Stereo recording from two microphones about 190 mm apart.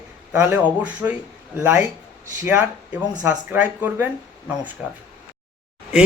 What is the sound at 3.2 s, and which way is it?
A man's voice, 10° right (ahead or behind).